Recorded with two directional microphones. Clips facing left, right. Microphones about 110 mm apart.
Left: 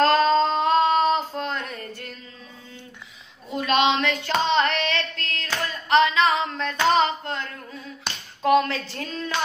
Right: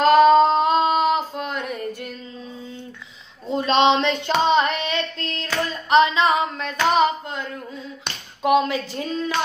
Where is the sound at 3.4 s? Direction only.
30° right (ahead or behind).